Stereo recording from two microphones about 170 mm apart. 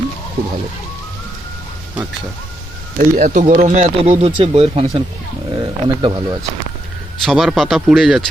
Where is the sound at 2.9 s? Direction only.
50° right (ahead or behind); by 6.3 s 30° right (ahead or behind).